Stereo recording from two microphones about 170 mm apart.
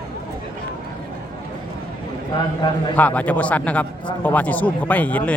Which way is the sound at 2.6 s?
25° left (ahead or behind).